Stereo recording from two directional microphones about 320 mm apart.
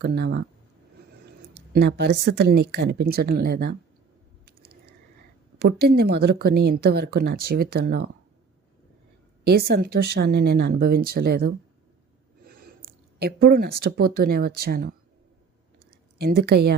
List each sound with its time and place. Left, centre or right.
0.0 s speech: right
1.5 s a woman's voice: right
4.6 s a sound: right
5.6 s speech: right
9.4 s speech: right
13.1 s speech: right
16.4 s speech: right